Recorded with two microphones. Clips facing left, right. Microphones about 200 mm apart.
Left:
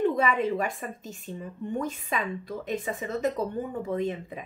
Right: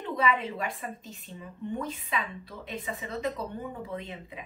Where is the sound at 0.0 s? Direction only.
45° left (ahead or behind).